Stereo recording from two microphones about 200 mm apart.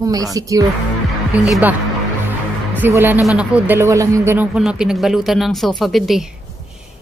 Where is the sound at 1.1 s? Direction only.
Centre (ahead or behind).